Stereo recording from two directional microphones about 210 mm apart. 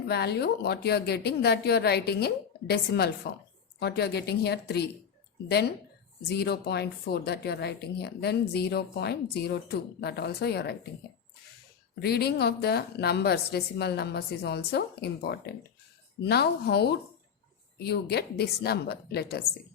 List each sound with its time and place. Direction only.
0.1 s speech: 50° left (ahead or behind)
11.9 s speech: 50° left (ahead or behind)